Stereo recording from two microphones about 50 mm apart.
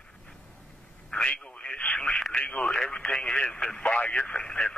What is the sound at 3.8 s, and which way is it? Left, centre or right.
Speech, left.